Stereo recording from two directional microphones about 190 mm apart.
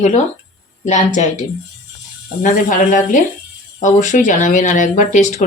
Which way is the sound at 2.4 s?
40° left (ahead or behind).